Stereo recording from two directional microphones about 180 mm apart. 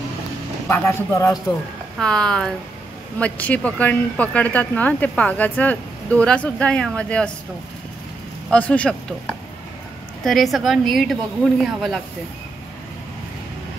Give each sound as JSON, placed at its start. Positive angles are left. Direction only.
{"t": 0.7, "sound": "speech", "side_deg": 10}
{"t": 2.0, "sound": "a woman's voice", "side_deg": 5}
{"t": 8.5, "sound": "speech", "side_deg": 5}
{"t": 10.2, "sound": "a woman's voice", "side_deg": 0}